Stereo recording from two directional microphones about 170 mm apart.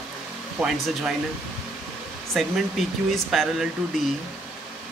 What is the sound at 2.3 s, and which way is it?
Speech, centre (ahead or behind).